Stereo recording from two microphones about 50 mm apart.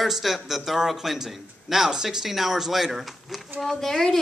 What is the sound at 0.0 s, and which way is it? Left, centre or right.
A man's voice, centre.